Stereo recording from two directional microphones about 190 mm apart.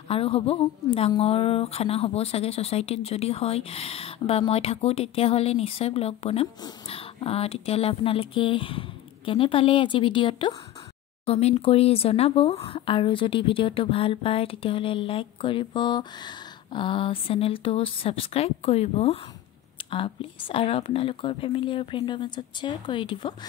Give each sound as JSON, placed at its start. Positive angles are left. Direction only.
{"t": 0.1, "sound": "speech", "side_deg": 30}